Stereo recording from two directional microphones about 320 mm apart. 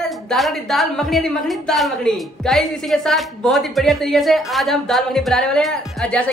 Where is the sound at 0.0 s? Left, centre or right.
Centre.